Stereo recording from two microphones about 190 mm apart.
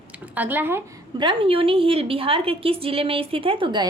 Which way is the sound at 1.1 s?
25° right (ahead or behind).